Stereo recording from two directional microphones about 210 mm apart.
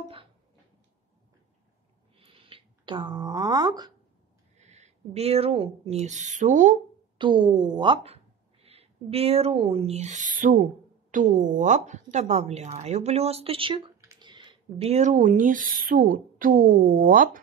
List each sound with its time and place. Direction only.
2.1 s a sound: 25° right (ahead or behind)
4.6 s speech: 30° right (ahead or behind)
7.2 s a woman's voice: 20° right (ahead or behind); by 17.4 s 40° right (ahead or behind)